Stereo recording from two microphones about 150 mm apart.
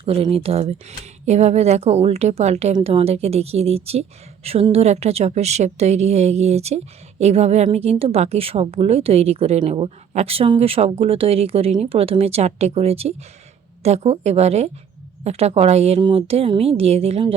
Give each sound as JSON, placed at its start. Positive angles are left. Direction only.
{"t": 0.0, "sound": "a woman's voice", "side_deg": -40}